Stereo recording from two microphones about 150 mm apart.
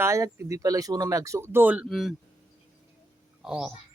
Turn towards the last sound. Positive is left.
turn(degrees=-5)  # may be behind; listen again after turning